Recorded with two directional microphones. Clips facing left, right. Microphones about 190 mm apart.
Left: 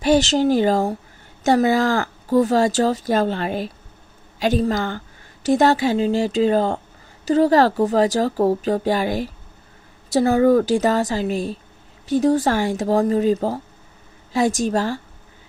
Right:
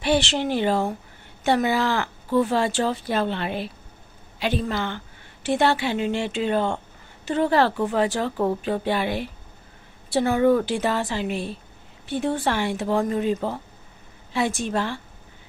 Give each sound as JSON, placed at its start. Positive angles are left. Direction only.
{"t": 0.0, "sound": "a woman's voice", "side_deg": 40}